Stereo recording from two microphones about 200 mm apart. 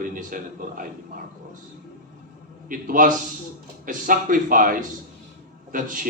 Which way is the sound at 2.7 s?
40° right (ahead or behind).